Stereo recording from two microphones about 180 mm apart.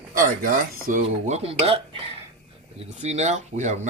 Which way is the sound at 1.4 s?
30° right (ahead or behind).